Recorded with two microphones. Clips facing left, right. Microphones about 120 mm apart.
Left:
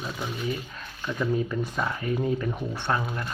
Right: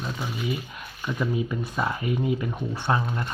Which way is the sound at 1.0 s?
10° right (ahead or behind).